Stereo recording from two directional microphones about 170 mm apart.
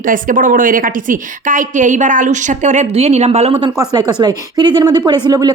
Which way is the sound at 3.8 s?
25° right (ahead or behind).